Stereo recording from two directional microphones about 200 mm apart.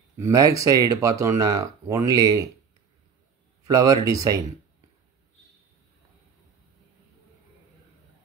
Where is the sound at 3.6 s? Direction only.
20° right (ahead or behind).